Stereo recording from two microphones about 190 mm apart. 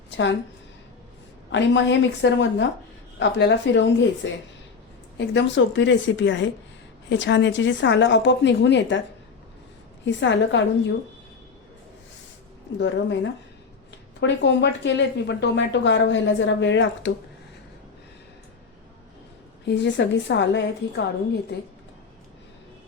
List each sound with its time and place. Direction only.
1.5 s a woman's voice: 70° left (ahead or behind)
10.2 s a woman's voice: 70° left (ahead or behind)
12.8 s a woman's voice: 70° left (ahead or behind)
19.6 s a woman's voice: 70° left (ahead or behind)